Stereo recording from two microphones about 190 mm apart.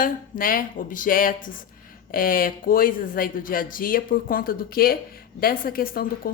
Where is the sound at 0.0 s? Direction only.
50° left (ahead or behind).